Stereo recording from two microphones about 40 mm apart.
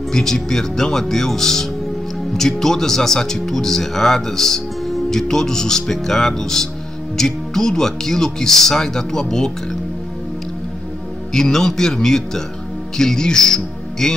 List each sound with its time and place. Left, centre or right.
0.1 s speech: centre
11.3 s speech: centre